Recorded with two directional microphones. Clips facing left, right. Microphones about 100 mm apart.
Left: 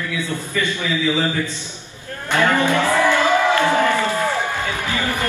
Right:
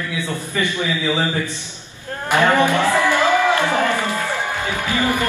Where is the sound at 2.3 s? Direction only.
20° right (ahead or behind).